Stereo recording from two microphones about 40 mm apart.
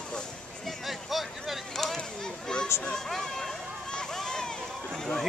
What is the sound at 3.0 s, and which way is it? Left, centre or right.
Speech, centre.